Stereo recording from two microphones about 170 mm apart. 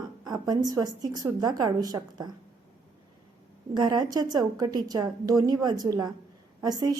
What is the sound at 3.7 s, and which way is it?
A woman's voice, 25° right (ahead or behind).